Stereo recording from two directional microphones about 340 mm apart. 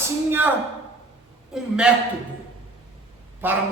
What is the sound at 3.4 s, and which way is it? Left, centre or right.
Speech, centre.